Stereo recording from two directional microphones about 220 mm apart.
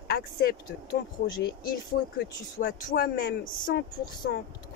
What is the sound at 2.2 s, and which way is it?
Speech, 45° left (ahead or behind).